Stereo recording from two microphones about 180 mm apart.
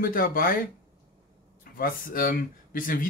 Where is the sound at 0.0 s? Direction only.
55° left (ahead or behind).